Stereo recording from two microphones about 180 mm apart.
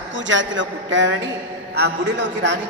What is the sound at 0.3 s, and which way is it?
A man's voice, 90° right.